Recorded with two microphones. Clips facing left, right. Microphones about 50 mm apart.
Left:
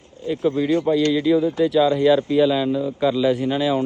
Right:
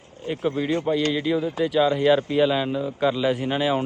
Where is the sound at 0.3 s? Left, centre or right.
Right.